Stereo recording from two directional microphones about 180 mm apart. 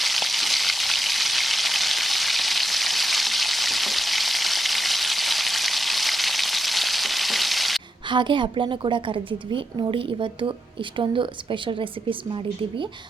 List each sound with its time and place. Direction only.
0.0 s frying: centre (ahead or behind)
8.1 s a woman's voice: 25° right (ahead or behind)